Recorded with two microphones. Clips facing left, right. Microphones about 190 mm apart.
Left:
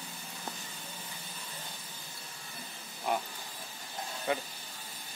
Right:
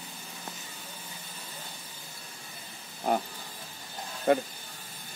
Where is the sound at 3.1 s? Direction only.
40° right (ahead or behind).